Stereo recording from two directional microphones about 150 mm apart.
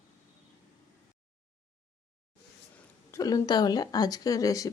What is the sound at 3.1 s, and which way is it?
A woman's voice, 25° left (ahead or behind).